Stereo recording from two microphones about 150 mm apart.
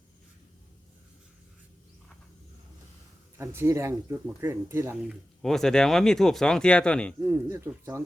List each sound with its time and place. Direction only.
3.3 s speech: 15° right (ahead or behind)
5.0 s speech: 5° left (ahead or behind)
7.2 s speech: 20° right (ahead or behind)